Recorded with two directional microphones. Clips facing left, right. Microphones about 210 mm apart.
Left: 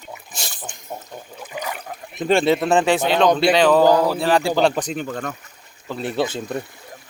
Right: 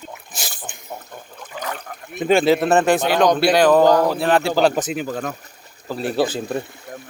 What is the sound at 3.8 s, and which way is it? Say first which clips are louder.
Speech: right 1 dB; 10° left (ahead or behind).